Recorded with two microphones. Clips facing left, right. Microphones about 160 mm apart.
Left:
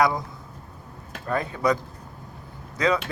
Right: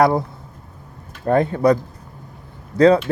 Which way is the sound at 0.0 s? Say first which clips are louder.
Right 6 dB; 60° right (ahead or behind).